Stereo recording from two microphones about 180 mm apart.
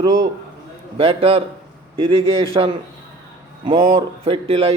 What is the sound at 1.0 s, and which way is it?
A man's voice, 30° right (ahead or behind).